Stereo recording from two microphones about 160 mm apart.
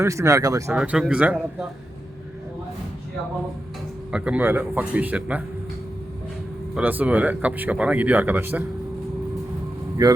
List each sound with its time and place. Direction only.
0.0 s speech: 20° right (ahead or behind)
0.7 s a man's voice: 5° right (ahead or behind)
4.1 s speech: 5° right (ahead or behind)
6.7 s speech: 10° right (ahead or behind)
10.0 s speech: 20° right (ahead or behind)